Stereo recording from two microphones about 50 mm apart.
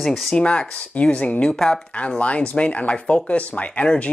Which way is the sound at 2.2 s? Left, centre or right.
Left.